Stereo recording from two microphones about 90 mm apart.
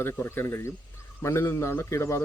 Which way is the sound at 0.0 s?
25° left (ahead or behind).